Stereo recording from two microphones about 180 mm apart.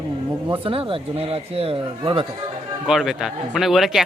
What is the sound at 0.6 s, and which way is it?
Speech, 30° right (ahead or behind).